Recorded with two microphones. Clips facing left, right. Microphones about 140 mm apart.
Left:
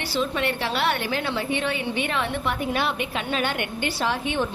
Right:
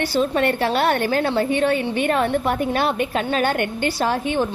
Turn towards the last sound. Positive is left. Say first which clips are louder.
# right 4 dB
turn(degrees=-40)  # may be behind; listen again after turning